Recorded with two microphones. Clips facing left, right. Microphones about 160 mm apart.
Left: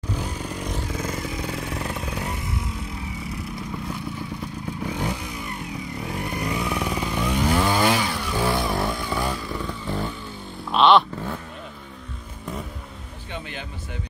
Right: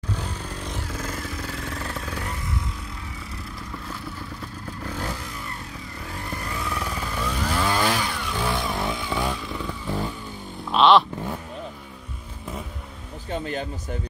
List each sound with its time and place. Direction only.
0.1 s motorcycle: 10° left (ahead or behind)
4.8 s vehicle: 15° left (ahead or behind)
6.3 s chainsaw: 15° left (ahead or behind); by 10.1 s 5° right (ahead or behind)
10.7 s vehicle: centre (ahead or behind)
13.3 s speech: 40° right (ahead or behind)